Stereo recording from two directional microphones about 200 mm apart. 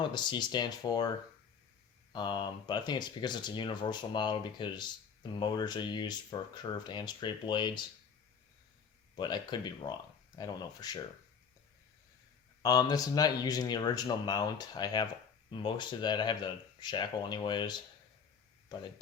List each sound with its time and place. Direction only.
0.0 s speech: 20° left (ahead or behind)
2.1 s speech: 20° left (ahead or behind)
9.1 s speech: 20° left (ahead or behind)
12.6 s speech: 20° left (ahead or behind)